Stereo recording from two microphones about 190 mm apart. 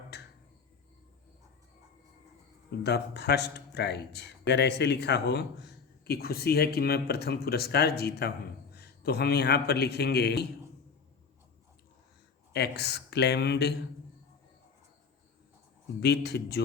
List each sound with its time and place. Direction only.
0.1 s a sound: 60° left (ahead or behind)
2.6 s a man's voice: 60° left (ahead or behind)
12.5 s speech: 60° left (ahead or behind)
16.0 s speech: 60° left (ahead or behind)